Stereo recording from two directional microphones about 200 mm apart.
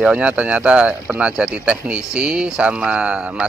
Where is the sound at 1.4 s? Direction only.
5° right (ahead or behind).